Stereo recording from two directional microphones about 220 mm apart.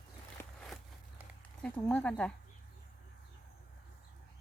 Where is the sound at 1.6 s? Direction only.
5° left (ahead or behind).